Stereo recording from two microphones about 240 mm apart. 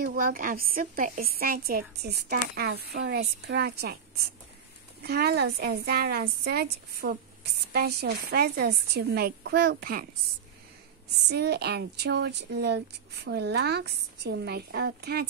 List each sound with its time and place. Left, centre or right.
0.0 s a woman's voice: right
5.0 s a woman's voice: right
11.2 s speech: right